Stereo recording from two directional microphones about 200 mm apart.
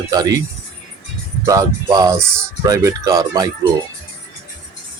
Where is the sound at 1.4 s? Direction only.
15° right (ahead or behind).